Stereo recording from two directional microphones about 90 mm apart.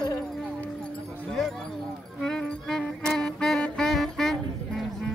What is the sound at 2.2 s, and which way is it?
Music, 10° left (ahead or behind).